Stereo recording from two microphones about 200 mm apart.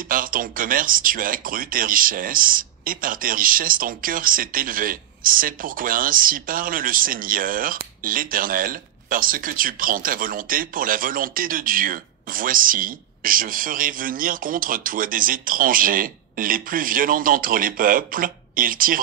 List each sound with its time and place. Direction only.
0.1 s speech: 45° right (ahead or behind)